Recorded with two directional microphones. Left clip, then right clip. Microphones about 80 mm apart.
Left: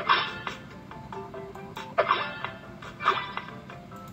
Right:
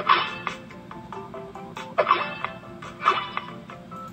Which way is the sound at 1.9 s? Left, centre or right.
Right.